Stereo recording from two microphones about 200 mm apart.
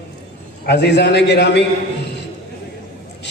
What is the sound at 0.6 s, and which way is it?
A man's voice, 55° left (ahead or behind).